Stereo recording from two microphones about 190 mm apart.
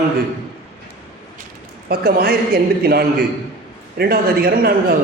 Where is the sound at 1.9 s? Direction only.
55° right (ahead or behind).